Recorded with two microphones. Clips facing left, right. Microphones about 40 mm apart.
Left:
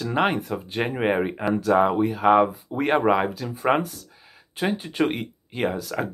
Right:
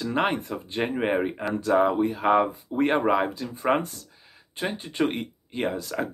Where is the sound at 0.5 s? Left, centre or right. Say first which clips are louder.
Left 3 dB; left.